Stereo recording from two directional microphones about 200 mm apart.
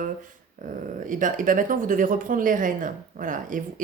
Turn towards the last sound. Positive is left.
turn(degrees=-40)  # may be behind; listen again after turning